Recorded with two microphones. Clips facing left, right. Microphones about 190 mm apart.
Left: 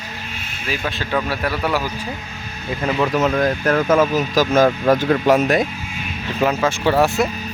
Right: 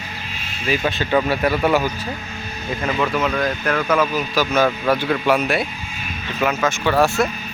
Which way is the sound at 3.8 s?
25° left (ahead or behind).